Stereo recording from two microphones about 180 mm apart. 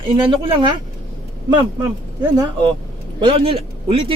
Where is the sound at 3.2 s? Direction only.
30° right (ahead or behind).